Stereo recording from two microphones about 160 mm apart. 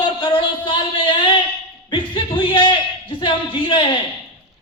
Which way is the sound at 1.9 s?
30° left (ahead or behind).